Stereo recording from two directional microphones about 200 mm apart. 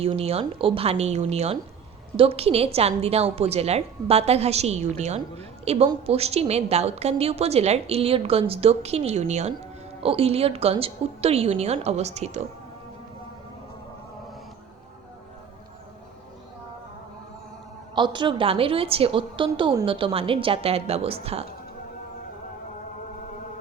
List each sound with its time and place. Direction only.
0.0 s a woman's voice: 30° right (ahead or behind)
17.9 s a woman's voice: 25° right (ahead or behind)